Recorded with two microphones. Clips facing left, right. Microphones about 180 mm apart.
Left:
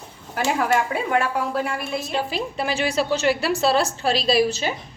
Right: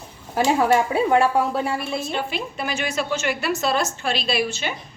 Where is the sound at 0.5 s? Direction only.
30° right (ahead or behind).